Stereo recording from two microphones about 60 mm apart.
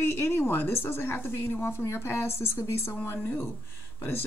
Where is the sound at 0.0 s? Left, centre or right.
Left.